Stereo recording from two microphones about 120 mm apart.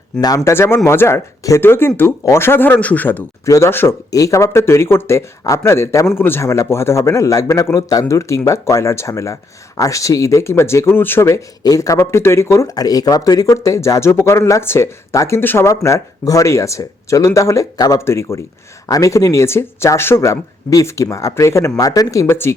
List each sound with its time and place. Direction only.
0.2 s a man's voice: 30° left (ahead or behind)